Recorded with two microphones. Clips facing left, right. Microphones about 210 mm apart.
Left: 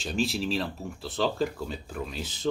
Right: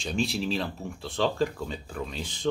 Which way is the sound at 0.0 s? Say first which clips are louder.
Even; centre (ahead or behind).